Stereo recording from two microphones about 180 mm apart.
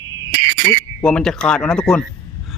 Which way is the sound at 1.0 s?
5° left (ahead or behind).